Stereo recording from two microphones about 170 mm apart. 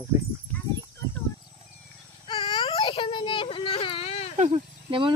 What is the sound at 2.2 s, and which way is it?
Baby cry, 30° left (ahead or behind).